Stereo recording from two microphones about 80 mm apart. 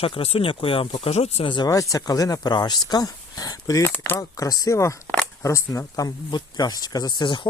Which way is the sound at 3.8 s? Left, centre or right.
Left.